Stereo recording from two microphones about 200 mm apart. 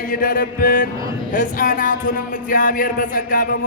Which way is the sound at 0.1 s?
45° left (ahead or behind).